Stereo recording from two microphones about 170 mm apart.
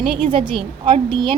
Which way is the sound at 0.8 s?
30° right (ahead or behind).